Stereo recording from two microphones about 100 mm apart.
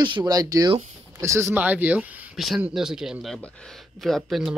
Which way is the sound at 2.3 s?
Centre (ahead or behind).